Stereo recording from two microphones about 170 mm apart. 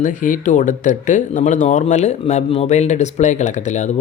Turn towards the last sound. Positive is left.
turn(degrees=45)  # may be behind; listen again after turning